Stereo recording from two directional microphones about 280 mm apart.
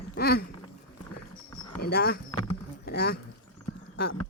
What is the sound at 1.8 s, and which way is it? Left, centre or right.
A man's voice, left.